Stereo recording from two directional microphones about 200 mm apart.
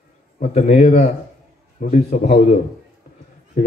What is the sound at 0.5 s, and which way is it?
A man's voice, 35° left (ahead or behind).